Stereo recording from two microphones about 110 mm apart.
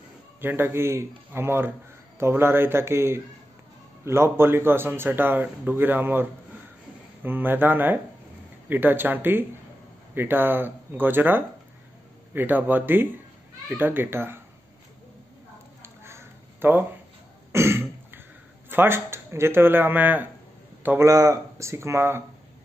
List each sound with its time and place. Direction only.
0.4 s speech: 20° right (ahead or behind)
7.2 s speech: 20° right (ahead or behind)
15.8 s a sound: 25° right (ahead or behind)
17.5 s throat clearing: 25° right (ahead or behind)
18.7 s a man's voice: 20° right (ahead or behind)
21.1 s speech: 30° right (ahead or behind)